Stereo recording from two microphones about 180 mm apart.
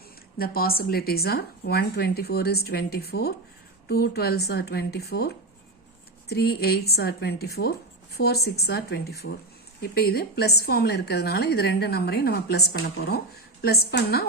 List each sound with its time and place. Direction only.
0.3 s a woman's voice: 55° left (ahead or behind)